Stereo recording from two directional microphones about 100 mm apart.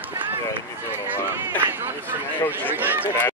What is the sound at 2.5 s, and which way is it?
Speech, 20° right (ahead or behind).